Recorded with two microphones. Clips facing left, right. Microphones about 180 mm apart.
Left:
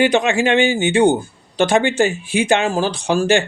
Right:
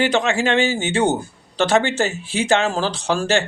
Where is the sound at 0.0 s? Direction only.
15° left (ahead or behind).